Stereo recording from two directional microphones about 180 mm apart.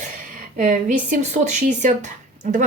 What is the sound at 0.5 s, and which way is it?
Speech, 45° right (ahead or behind).